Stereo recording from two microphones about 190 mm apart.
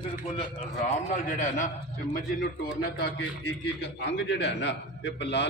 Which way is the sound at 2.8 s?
55° left (ahead or behind).